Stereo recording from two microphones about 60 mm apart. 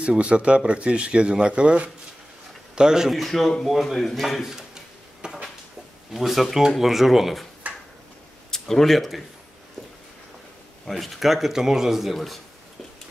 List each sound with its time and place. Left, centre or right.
0.0 s a man's voice: centre
3.1 s a man's voice: centre
5.2 s a sound: centre
6.1 s a man's voice: centre
7.7 s tick-tock: right
8.5 s speech: centre
10.9 s a man's voice: centre